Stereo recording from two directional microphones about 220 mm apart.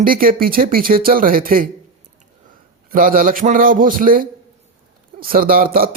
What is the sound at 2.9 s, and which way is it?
Speech, 40° right (ahead or behind).